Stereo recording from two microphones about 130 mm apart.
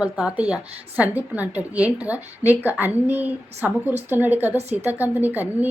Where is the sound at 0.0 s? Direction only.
10° right (ahead or behind).